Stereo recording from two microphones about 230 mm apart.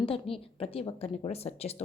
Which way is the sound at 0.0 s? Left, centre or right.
Left.